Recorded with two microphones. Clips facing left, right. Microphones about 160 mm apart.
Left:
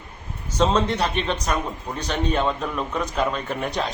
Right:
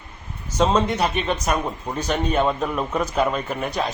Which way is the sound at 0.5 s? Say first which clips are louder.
Right 1 dB; 10° right (ahead or behind).